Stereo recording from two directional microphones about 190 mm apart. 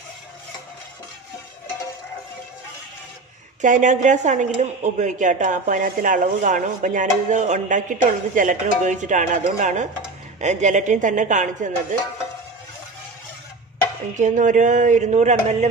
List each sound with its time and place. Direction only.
3.6 s speech: 40° right (ahead or behind)
14.1 s speech: 40° right (ahead or behind)